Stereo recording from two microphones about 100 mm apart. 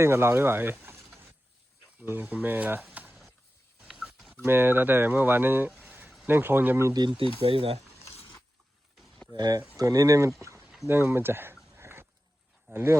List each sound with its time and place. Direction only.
0.0 s speech: 25° right (ahead or behind)
2.9 s a sound: 15° right (ahead or behind); by 4.4 s centre (ahead or behind)
4.4 s speech: 20° right (ahead or behind)
5.8 s a sound: 15° right (ahead or behind)
6.2 s speech: 20° right (ahead or behind)
6.9 s speech: 50° right (ahead or behind); by 7.9 s 75° right (ahead or behind)
9.3 s speech: 40° right (ahead or behind)
10.6 s a sound: 5° right (ahead or behind)
10.8 s speech: 25° right (ahead or behind)
11.7 s dog: 25° right (ahead or behind)
12.7 s speech: 25° right (ahead or behind)